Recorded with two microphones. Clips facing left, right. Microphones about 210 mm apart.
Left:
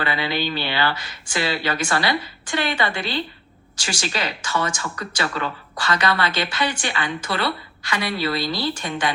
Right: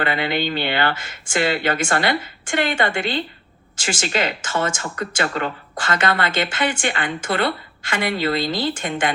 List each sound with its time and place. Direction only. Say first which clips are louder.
0.0 s speech: right 2 dB; 55° right (ahead or behind)